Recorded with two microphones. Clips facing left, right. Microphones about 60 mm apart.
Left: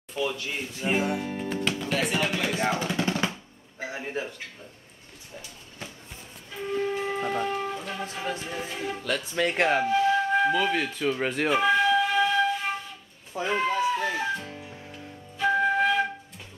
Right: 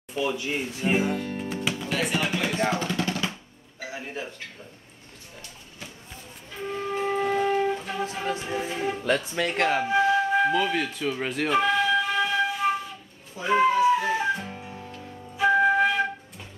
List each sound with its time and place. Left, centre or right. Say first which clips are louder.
0.1 s speech: right 2 dB; centre
0.8 s speech: right 1 dB; centre
3.0 s drum: left 1 dB; left
3.8 s a sound: left 2 dB; left
7.2 s music: right 4 dB; centre; by 9.2 s right
9.3 s speech: left 1 dB; centre
10.3 s wind instrument: right 1 dB; centre
13.4 s a sound: right 5 dB; centre
14.4 s music: right 2 dB; right
15.3 s flute: right 3 dB; centre